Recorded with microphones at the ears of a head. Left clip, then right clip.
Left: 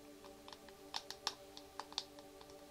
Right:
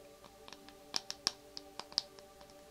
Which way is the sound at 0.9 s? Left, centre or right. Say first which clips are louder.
Right 6 dB; right.